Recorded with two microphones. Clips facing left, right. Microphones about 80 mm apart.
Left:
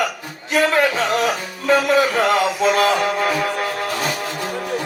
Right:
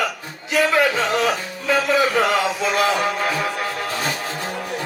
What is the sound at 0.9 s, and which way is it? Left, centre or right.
Music, right.